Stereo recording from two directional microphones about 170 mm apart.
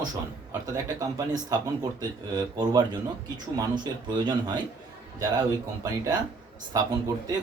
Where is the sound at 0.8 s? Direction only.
20° right (ahead or behind).